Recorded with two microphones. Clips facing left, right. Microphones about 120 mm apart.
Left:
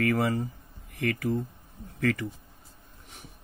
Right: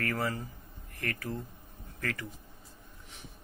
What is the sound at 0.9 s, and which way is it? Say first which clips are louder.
Speech: left 9 dB; 90° left.